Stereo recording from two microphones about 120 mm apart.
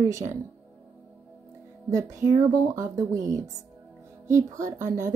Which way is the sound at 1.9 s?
25° right (ahead or behind).